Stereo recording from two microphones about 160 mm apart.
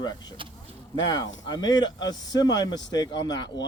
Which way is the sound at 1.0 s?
25° left (ahead or behind).